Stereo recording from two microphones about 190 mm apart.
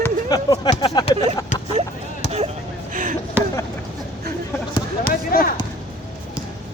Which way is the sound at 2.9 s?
45° right (ahead or behind).